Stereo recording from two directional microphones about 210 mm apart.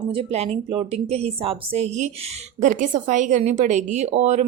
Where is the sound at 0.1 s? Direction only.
30° right (ahead or behind).